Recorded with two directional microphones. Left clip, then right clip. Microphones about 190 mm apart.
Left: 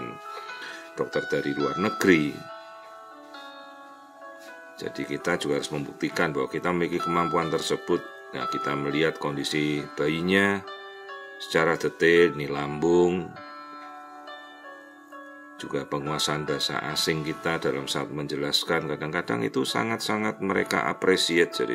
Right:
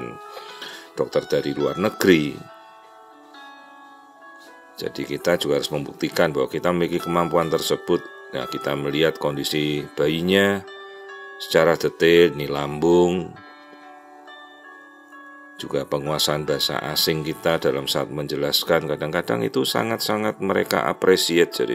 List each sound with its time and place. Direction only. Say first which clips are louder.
0.3 s speech: right 1 dB; 20° right (ahead or behind)
4.7 s speech: right 4 dB; 25° right (ahead or behind)
15.5 s speech: right 6 dB; 25° right (ahead or behind)